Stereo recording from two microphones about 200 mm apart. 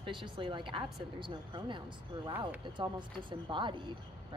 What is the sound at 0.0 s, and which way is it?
Speech, 25° right (ahead or behind).